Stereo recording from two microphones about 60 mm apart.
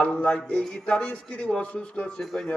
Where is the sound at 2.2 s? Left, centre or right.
Centre.